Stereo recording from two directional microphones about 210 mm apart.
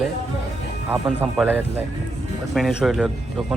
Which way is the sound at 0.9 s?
5° right (ahead or behind).